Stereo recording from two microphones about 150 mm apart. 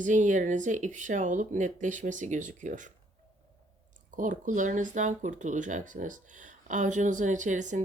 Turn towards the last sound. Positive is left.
turn(degrees=-55)  # may be behind; listen again after turning